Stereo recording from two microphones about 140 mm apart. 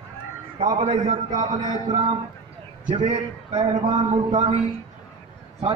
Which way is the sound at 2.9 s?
55° right (ahead or behind).